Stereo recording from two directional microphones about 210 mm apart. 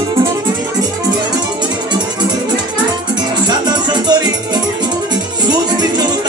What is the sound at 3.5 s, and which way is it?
Music, 20° right (ahead or behind).